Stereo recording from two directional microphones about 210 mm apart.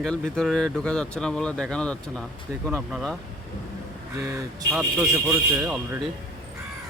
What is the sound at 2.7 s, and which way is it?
Speech, 5° right (ahead or behind).